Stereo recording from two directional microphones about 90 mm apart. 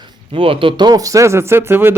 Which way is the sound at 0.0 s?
75° right (ahead or behind).